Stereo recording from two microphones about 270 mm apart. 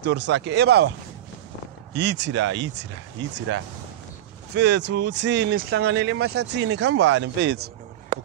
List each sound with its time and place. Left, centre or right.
0.0 s speech: right
2.0 s speech: right